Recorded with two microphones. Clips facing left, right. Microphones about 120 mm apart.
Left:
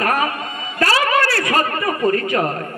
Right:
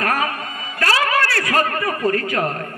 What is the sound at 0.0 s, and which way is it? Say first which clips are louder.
Music: left 2 dB; 20° left (ahead or behind).